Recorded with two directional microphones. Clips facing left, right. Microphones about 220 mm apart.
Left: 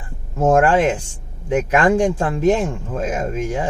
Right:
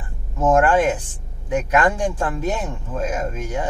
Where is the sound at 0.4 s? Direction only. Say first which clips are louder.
Left 2 dB; 25° left (ahead or behind).